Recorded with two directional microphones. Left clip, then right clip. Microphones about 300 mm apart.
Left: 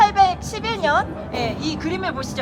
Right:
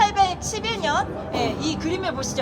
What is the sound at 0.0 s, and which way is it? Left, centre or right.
A woman's voice, centre.